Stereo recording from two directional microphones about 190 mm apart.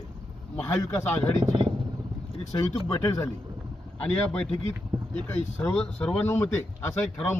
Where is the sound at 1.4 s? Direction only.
25° right (ahead or behind).